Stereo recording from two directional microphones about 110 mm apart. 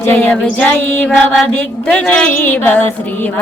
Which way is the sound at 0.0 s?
15° left (ahead or behind).